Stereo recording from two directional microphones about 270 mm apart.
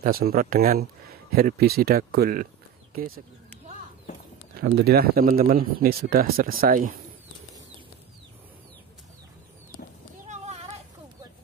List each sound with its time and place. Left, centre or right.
0.0 s speech: right
4.6 s speech: right
10.2 s a sound: right